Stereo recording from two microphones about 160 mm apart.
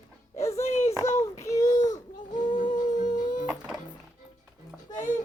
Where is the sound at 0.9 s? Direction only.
20° left (ahead or behind).